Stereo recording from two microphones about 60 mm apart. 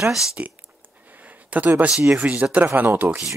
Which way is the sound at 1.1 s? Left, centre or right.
Right.